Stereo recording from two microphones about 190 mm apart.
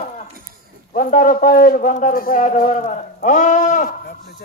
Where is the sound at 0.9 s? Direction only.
45° left (ahead or behind).